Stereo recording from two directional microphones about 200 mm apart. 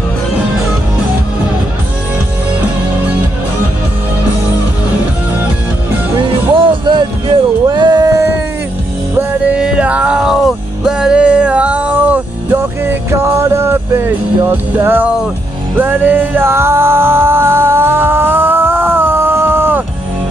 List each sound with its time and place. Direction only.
6.1 s music: 25° right (ahead or behind)
7.7 s a sound: 20° right (ahead or behind)
9.1 s music: 5° right (ahead or behind)